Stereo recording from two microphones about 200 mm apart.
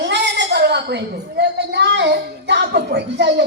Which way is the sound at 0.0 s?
60° right (ahead or behind).